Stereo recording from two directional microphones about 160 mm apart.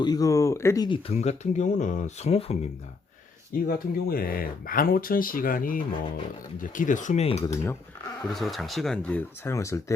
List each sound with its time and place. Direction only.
0.0 s speech: 25° left (ahead or behind)
0.9 s speech: 40° left (ahead or behind)
3.7 s speech: 65° left (ahead or behind); by 7.4 s 45° left (ahead or behind)
7.4 s speech: 15° left (ahead or behind)
8.3 s speech: centre (ahead or behind); by 9.8 s 20° left (ahead or behind)